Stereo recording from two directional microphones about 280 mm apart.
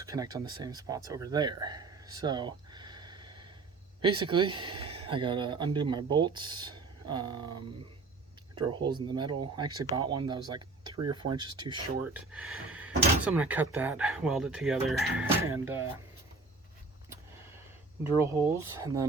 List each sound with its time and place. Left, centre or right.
0.0 s speech: centre
8.5 s speech: centre
18.8 s speech: centre